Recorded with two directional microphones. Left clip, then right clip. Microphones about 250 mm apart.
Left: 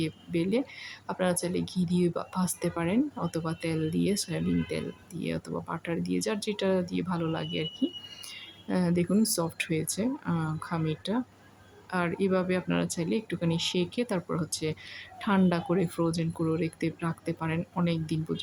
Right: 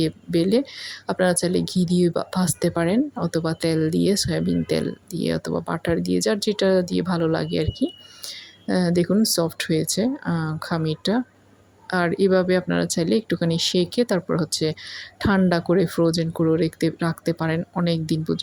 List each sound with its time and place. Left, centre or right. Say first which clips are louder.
0.0 s speech: right 9 dB; centre